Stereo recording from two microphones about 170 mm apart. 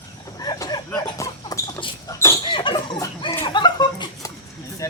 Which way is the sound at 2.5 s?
30° left (ahead or behind).